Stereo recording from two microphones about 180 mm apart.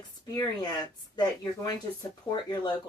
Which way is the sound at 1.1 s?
20° left (ahead or behind).